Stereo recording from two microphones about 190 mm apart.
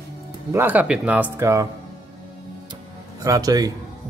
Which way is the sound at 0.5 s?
10° right (ahead or behind).